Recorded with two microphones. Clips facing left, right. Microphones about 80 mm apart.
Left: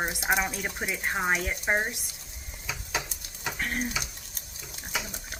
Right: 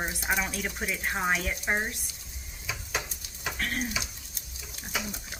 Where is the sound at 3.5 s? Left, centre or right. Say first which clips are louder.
Left 1 dB; centre.